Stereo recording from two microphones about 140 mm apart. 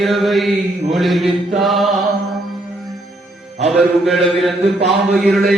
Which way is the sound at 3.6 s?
Centre (ahead or behind).